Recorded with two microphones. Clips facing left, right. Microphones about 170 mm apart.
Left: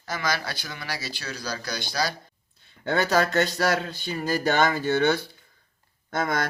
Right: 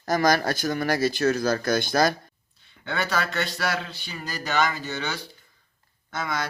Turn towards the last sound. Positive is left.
turn(degrees=50)  # may be behind; listen again after turning